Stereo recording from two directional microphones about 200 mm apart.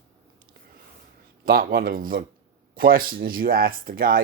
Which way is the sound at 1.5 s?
45° right (ahead or behind).